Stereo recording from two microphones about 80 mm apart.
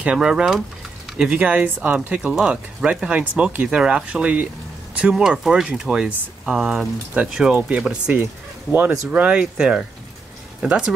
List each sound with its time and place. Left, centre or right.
0.0 s speech: centre